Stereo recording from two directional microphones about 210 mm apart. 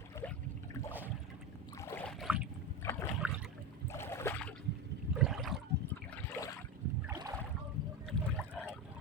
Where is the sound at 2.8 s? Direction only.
15° left (ahead or behind).